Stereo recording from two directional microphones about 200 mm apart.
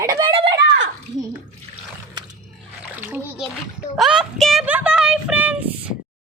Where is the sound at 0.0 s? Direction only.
20° right (ahead or behind).